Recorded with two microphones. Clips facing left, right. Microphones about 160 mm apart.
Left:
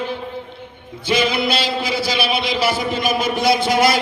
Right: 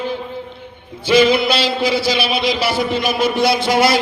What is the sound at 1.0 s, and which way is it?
A man's voice, 50° left (ahead or behind).